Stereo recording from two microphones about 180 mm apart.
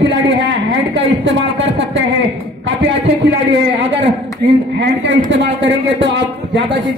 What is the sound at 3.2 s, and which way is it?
A man's voice, 85° right.